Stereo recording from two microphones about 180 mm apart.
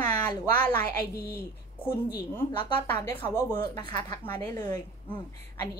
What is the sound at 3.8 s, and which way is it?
Speech, 25° left (ahead or behind).